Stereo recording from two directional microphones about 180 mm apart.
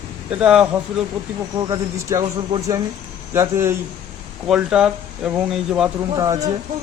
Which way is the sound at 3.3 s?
15° right (ahead or behind).